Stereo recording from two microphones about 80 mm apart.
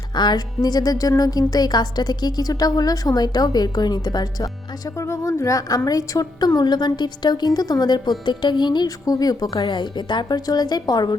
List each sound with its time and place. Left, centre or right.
0.2 s a woman's voice: left
4.9 s a woman's voice: left